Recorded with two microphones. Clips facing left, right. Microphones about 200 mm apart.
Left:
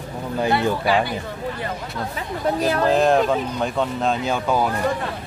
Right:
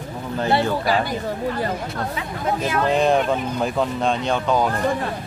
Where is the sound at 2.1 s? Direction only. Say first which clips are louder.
Left 4 dB; 35° left (ahead or behind).